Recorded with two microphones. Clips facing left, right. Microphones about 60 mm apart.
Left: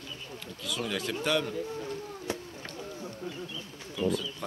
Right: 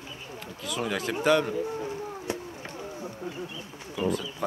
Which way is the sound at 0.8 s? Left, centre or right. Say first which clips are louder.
Right 4 dB; centre.